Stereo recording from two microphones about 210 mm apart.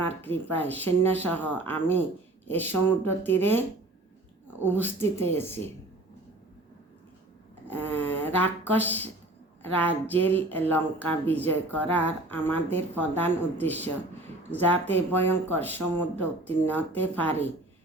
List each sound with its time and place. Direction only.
0.0 s speech: 10° left (ahead or behind)
4.6 s speech: 10° left (ahead or behind)
7.7 s speech: 10° left (ahead or behind)